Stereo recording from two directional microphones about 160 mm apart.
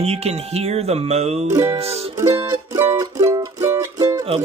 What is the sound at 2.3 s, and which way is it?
Music, 15° right (ahead or behind).